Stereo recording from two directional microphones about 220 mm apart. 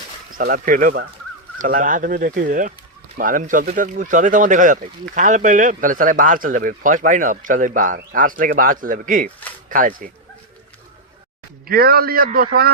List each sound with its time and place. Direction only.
0.3 s speech: 40° right (ahead or behind)
11.7 s a man's voice: 45° right (ahead or behind)